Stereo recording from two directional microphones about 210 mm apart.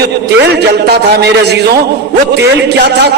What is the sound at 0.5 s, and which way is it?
A man's voice, 50° right (ahead or behind).